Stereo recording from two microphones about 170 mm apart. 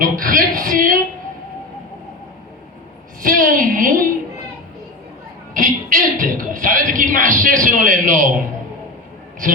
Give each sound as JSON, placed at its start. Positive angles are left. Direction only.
{"t": 0.0, "sound": "speech", "side_deg": -55}
{"t": 3.2, "sound": "a woman's voice", "side_deg": -50}
{"t": 5.5, "sound": "speech", "side_deg": -50}